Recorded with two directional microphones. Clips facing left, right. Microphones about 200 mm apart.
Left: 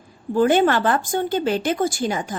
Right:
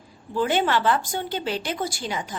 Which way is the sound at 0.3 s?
50° left (ahead or behind).